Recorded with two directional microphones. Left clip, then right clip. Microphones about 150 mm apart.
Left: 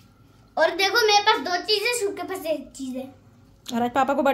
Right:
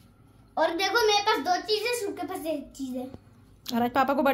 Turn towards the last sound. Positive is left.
turn(degrees=5)  # may be behind; listen again after turning